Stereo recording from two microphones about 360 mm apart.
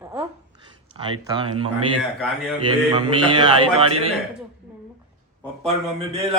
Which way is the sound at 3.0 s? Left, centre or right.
Centre.